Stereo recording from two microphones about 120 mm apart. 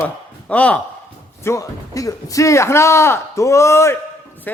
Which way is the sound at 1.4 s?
25° left (ahead or behind).